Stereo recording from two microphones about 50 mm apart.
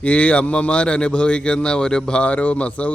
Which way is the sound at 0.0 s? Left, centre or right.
Left.